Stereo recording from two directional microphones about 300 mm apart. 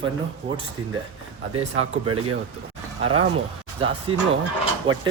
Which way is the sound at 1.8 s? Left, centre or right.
Right.